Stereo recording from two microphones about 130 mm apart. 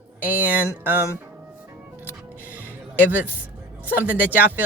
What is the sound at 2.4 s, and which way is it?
Music, 15° right (ahead or behind).